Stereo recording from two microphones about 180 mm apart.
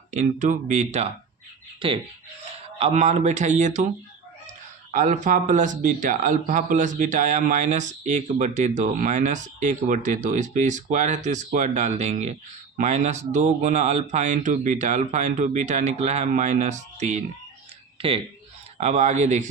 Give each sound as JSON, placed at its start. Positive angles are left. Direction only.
{"t": 0.1, "sound": "speech", "side_deg": -45}
{"t": 1.8, "sound": "speech", "side_deg": -30}
{"t": 4.9, "sound": "speech", "side_deg": -45}
{"t": 18.8, "sound": "speech", "side_deg": -40}